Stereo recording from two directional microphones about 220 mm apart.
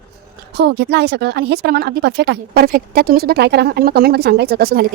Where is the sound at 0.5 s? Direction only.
50° right (ahead or behind).